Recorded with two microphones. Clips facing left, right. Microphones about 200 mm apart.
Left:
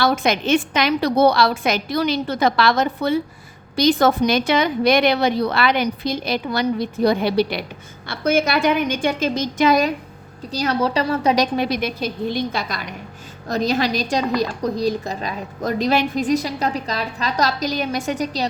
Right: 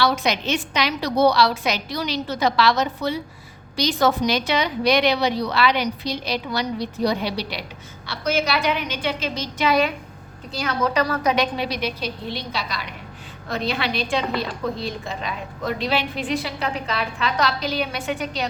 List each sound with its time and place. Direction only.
0.0 s a woman's voice: 50° left (ahead or behind); by 11.4 s 30° left (ahead or behind)
11.5 s a woman's voice: 50° left (ahead or behind)